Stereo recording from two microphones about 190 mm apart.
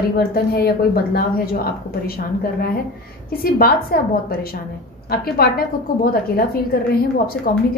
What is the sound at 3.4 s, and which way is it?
A woman's voice, 50° left (ahead or behind).